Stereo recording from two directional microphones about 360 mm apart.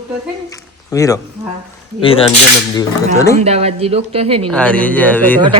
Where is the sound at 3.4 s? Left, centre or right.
Centre.